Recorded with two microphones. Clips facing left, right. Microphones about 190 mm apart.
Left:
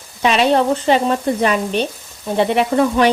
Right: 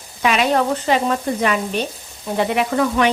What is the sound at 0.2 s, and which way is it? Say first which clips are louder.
Speech: left 3 dB; 30° left (ahead or behind).